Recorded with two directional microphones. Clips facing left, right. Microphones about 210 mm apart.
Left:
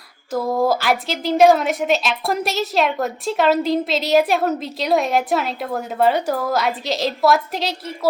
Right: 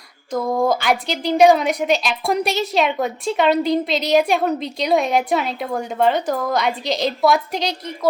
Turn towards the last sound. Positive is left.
turn(degrees=5)  # may be behind; listen again after turning